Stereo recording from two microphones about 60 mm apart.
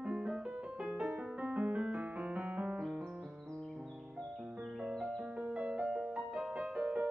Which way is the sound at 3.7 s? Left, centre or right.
Centre.